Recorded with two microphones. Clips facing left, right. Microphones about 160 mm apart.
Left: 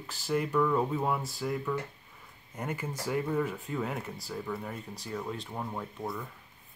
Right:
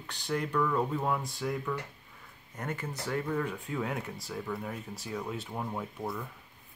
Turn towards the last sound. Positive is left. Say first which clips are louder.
# right 1 dB
turn(degrees=0)  # may be behind; listen again after turning